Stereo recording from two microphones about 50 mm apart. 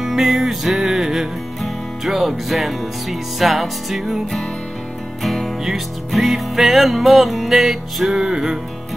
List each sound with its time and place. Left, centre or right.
0.0 s music: centre